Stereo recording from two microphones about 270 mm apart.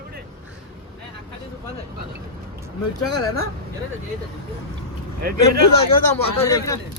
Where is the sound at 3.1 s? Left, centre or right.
Left.